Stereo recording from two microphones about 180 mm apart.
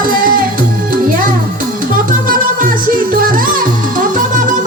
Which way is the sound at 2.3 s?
50° right (ahead or behind).